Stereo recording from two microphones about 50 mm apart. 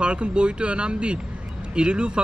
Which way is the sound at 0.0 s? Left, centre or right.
Right.